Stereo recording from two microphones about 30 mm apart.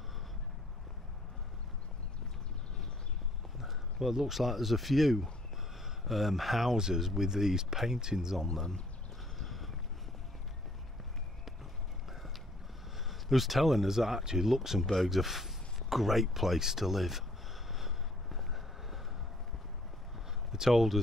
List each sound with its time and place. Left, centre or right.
3.5 s a sound: centre
4.4 s speech: centre; by 8.4 s right
9.4 s boat: centre
13.1 s speech: centre
17.7 s vehicle: centre
20.5 s speech: centre